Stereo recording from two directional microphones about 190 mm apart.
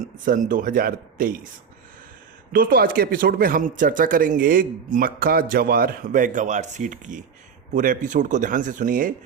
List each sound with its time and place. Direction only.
0.0 s speech: 45° right (ahead or behind)
2.5 s speech: 50° right (ahead or behind)